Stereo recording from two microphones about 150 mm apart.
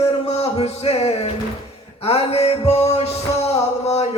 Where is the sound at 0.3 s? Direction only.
45° left (ahead or behind).